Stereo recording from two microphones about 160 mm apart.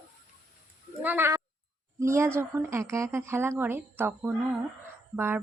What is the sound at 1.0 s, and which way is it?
Speech, 10° right (ahead or behind).